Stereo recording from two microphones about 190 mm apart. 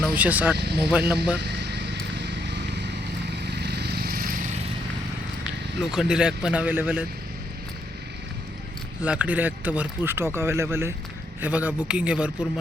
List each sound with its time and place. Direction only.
0.0 s speech: 10° right (ahead or behind)
0.5 s speech: 60° right (ahead or behind)
0.9 s speech: 5° right (ahead or behind)
1.4 s vehicle: 60° right (ahead or behind)
5.8 s speech: 5° right (ahead or behind)
9.0 s speech: 10° right (ahead or behind)